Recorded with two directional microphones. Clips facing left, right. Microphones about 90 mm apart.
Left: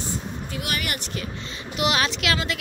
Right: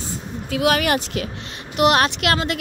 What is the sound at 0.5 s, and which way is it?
Speech, 90° right.